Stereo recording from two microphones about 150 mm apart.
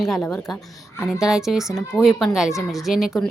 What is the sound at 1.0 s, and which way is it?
Speech, 5° right (ahead or behind).